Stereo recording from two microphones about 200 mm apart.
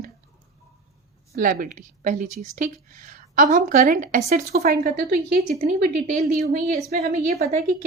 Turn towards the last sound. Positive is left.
turn(degrees=-50)  # may be behind; listen again after turning